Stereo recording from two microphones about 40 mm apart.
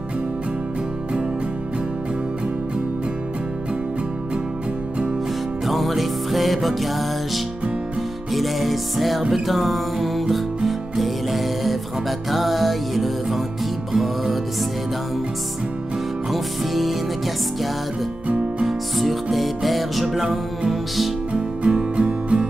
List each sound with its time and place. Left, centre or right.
5.7 s music: centre
16.3 s music: centre
18.7 s music: centre
21.3 s music: right